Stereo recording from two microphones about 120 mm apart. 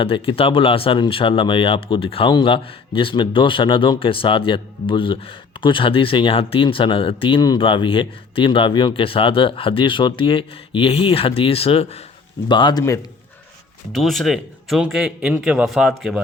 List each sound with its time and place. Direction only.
0.0 s speech: 50° left (ahead or behind)
12.5 s a man's voice: 40° left (ahead or behind)
12.8 s a man's voice: 30° left (ahead or behind)
13.9 s speech: centre (ahead or behind)